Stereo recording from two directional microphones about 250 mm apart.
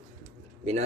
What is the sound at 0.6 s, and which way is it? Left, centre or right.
Speech, right.